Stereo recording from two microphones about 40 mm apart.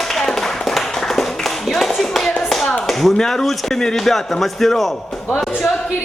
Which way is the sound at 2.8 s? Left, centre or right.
Centre.